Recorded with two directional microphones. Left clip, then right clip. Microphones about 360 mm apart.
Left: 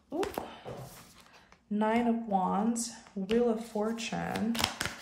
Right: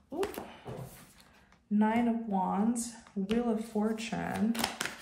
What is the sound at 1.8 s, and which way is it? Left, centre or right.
Speech, centre.